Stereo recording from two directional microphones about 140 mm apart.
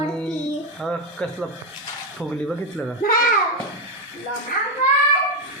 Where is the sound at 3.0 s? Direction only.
85° left.